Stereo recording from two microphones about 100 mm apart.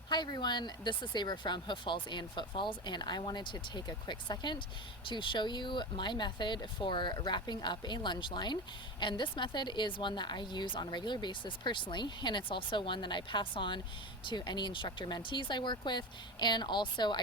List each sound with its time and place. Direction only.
0.1 s a woman's voice: 50° left (ahead or behind)